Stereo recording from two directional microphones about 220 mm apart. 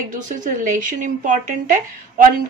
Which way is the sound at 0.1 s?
35° right (ahead or behind).